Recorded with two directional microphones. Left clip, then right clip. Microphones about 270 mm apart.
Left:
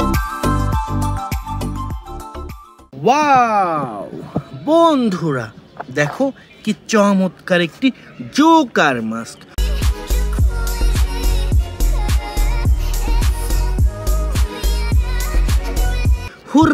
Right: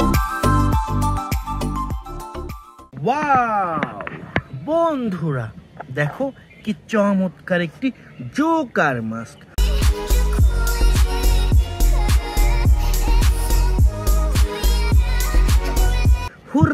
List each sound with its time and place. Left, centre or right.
0.0 s music: centre
3.0 s speech: centre
4.6 s speech: centre
8.7 s music: centre